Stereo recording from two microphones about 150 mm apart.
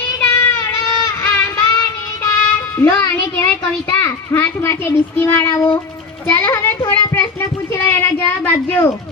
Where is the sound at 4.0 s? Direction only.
15° left (ahead or behind).